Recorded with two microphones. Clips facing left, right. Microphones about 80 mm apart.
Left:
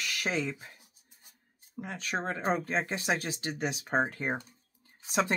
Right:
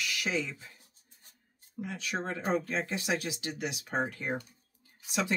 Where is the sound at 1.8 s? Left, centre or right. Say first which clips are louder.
Left 1 dB; left.